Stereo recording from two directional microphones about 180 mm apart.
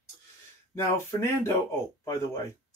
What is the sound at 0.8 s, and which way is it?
Speech, 15° left (ahead or behind).